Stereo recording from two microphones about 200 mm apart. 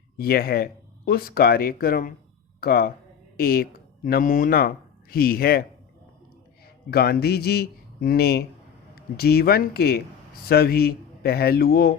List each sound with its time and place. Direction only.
0.2 s speech: 50° left (ahead or behind)
6.9 s speech: 50° left (ahead or behind)